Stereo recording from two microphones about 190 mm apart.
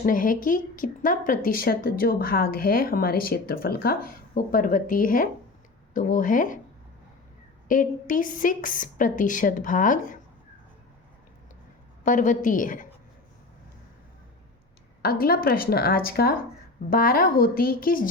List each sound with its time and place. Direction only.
0.0 s a woman's voice: 45° left (ahead or behind)
7.7 s a woman's voice: 45° left (ahead or behind)
12.0 s a woman's voice: 40° left (ahead or behind)
15.0 s a woman's voice: 50° left (ahead or behind)